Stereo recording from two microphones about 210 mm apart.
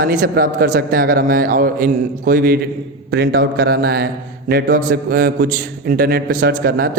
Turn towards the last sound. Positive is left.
turn(degrees=-45)  # may be behind; listen again after turning